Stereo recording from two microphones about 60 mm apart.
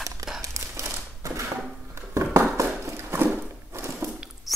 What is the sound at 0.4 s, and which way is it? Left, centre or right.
Crumpling, right.